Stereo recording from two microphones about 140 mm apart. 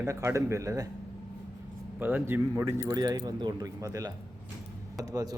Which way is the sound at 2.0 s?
15° right (ahead or behind).